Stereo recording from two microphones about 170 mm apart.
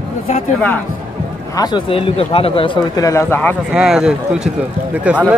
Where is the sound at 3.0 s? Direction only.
15° left (ahead or behind).